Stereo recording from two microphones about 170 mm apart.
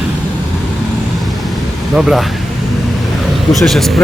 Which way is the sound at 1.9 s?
5° right (ahead or behind).